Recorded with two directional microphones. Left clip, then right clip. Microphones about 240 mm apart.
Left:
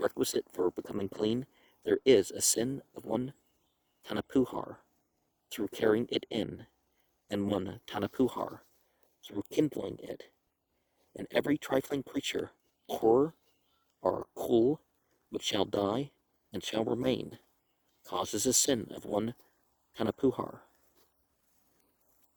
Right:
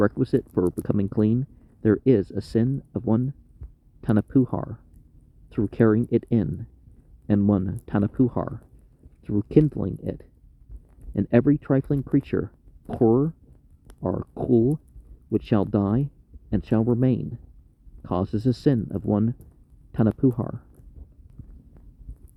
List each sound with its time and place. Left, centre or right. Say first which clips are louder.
0.0 s speech: right 8 dB; left
11.3 s speech: right 8 dB; left